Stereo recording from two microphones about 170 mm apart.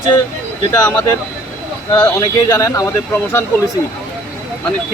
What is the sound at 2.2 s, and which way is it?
Speech, 20° left (ahead or behind).